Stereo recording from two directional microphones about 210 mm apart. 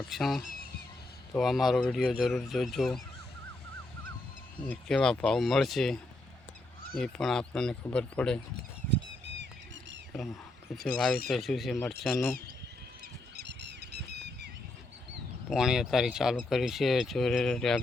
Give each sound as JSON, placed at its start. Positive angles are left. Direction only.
{"t": 0.1, "sound": "speech", "side_deg": 0}
{"t": 4.6, "sound": "speech", "side_deg": 5}
{"t": 10.8, "sound": "speech", "side_deg": 5}
{"t": 13.3, "sound": "goose", "side_deg": -55}
{"t": 15.4, "sound": "speech", "side_deg": -5}